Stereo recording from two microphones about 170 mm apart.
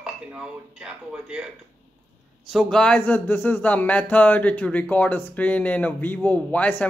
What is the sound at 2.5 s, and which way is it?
Speech, 5° left (ahead or behind).